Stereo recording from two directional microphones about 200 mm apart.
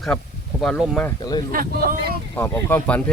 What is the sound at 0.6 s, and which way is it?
Speech, 5° left (ahead or behind).